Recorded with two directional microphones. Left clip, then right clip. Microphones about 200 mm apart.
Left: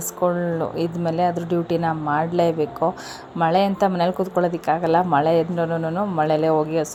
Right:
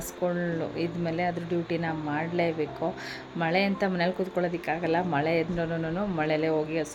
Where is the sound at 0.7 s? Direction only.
20° left (ahead or behind).